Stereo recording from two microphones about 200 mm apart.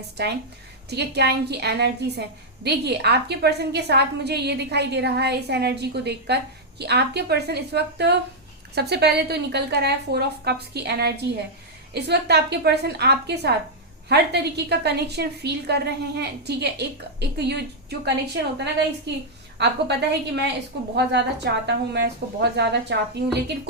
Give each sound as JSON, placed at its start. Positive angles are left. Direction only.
{"t": 0.2, "sound": "a woman's voice", "side_deg": -55}
{"t": 19.5, "sound": "a woman's voice", "side_deg": -60}